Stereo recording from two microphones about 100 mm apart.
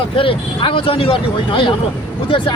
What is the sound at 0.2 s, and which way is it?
Speech, 60° left (ahead or behind).